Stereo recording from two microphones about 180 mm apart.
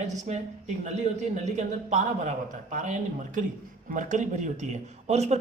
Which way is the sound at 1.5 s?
40° right (ahead or behind).